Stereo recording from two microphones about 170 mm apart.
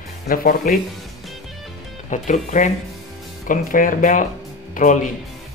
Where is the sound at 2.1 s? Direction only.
45° left (ahead or behind).